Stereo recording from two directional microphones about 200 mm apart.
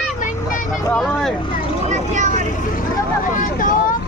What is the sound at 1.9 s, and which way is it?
Vehicle, 35° right (ahead or behind).